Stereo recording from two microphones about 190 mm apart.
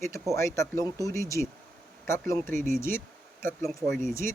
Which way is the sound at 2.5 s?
45° right (ahead or behind).